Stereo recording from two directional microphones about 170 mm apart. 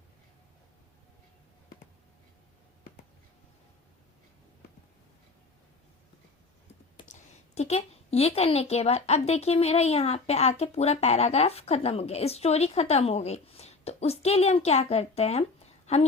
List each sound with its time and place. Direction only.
7.1 s a woman's voice: 40° left (ahead or behind)